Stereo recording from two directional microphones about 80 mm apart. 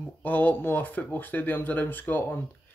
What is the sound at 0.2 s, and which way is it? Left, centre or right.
Speech, left.